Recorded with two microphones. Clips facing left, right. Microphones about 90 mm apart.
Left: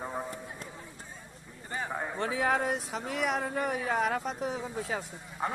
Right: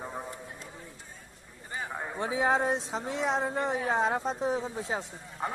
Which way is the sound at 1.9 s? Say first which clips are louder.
Left 3 dB; centre (ahead or behind).